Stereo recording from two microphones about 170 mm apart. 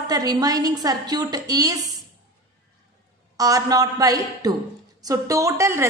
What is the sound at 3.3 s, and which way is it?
A woman's voice, 20° right (ahead or behind).